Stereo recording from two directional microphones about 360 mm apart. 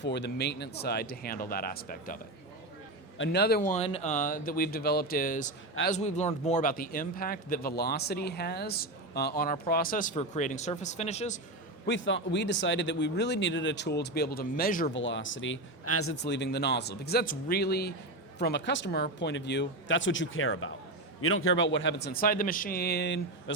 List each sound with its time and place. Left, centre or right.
0.0 s speech: left
3.2 s speech: left
11.9 s speech: left